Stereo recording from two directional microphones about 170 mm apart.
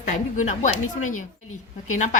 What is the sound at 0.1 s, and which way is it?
A woman's voice, 45° left (ahead or behind).